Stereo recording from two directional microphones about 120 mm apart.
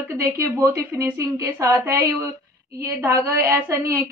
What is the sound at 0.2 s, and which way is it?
A woman's voice, 25° right (ahead or behind).